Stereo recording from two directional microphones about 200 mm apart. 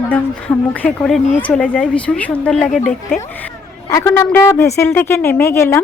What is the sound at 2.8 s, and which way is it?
Speech, 40° left (ahead or behind).